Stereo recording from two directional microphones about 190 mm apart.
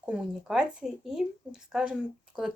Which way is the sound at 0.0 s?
Centre (ahead or behind).